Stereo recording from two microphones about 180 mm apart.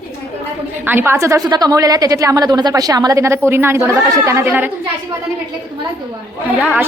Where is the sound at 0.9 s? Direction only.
10° right (ahead or behind).